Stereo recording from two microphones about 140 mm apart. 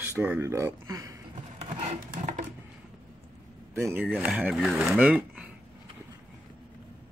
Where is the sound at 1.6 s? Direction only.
50° right (ahead or behind).